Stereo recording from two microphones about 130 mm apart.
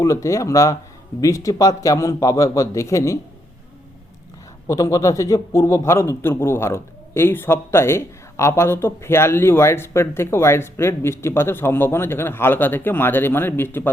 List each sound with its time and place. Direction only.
0.0 s a man's voice: 25° left (ahead or behind)
4.7 s a man's voice: 25° left (ahead or behind)